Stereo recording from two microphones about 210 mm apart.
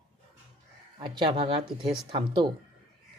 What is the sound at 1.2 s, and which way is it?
Speech, 25° right (ahead or behind).